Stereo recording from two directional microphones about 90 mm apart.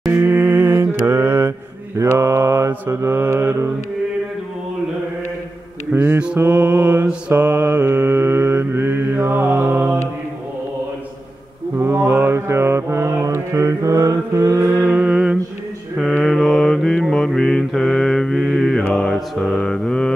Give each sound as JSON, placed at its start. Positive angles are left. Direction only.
{"t": 0.1, "sound": "mantra", "side_deg": -25}
{"t": 5.9, "sound": "mantra", "side_deg": -20}
{"t": 7.8, "sound": "mantra", "side_deg": -30}
{"t": 11.8, "sound": "mantra", "side_deg": -25}
{"t": 14.8, "sound": "mantra", "side_deg": -15}
{"t": 16.3, "sound": "mantra", "side_deg": 5}